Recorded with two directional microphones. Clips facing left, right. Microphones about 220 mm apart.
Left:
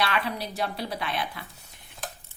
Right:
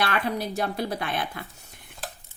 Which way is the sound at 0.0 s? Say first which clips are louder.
Right 2 dB; 50° right (ahead or behind).